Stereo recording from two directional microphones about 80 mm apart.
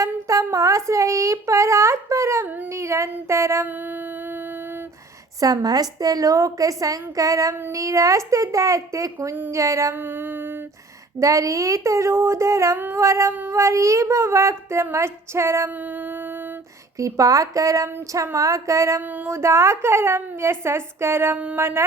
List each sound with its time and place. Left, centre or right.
0.0 s child singing: right
5.6 s a woman's voice: right
7.7 s child singing: right
9.9 s a sound: right
11.2 s child singing: right
17.0 s a woman's voice: right
18.3 s child singing: right
19.1 s child singing: right
21.3 s speech: centre
21.6 s child singing: right